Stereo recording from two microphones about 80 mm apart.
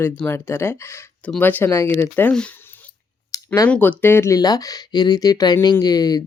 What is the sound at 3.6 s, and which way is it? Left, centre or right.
Speech, centre.